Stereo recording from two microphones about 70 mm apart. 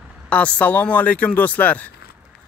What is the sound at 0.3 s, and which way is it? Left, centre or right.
A man's voice, centre.